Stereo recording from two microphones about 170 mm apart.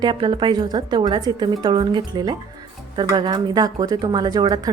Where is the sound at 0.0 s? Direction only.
30° right (ahead or behind).